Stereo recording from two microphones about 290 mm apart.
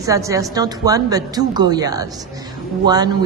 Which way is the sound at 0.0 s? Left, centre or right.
Centre.